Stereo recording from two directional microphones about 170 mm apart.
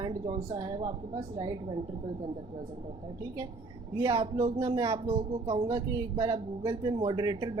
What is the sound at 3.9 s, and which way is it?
Speech, 25° right (ahead or behind).